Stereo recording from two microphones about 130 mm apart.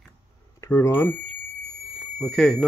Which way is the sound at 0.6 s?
20° left (ahead or behind).